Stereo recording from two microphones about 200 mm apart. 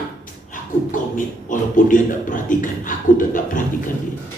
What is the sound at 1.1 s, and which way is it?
A man's voice, 40° left (ahead or behind).